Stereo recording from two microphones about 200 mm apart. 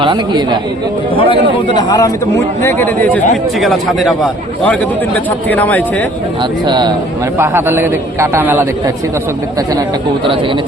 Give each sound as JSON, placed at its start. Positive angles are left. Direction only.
{"t": 0.0, "sound": "speech", "side_deg": -20}
{"t": 1.1, "sound": "a man's voice", "side_deg": 25}
{"t": 6.7, "sound": "a man's voice", "side_deg": -20}